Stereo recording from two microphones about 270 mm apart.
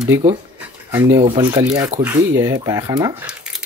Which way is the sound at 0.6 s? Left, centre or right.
Centre.